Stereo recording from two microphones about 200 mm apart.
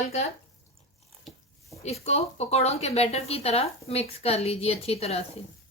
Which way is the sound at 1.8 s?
30° left (ahead or behind).